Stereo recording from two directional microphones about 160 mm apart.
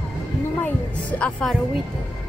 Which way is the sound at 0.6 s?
10° left (ahead or behind).